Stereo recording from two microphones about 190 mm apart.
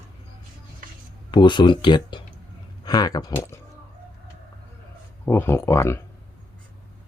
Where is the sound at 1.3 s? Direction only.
25° left (ahead or behind).